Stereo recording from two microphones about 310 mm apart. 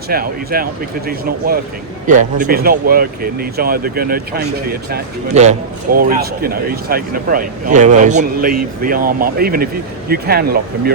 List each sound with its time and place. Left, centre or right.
0.1 s a man's voice: right